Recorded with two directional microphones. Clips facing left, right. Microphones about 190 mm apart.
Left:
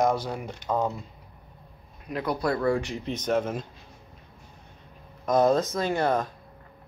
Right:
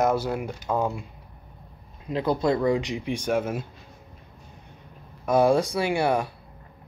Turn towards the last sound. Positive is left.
turn(degrees=-10)  # may be behind; listen again after turning